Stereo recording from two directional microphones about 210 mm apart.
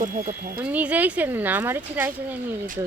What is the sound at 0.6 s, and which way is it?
Speech, 5° right (ahead or behind).